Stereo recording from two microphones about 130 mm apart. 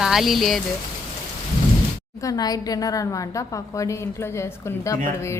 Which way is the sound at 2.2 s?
30° left (ahead or behind).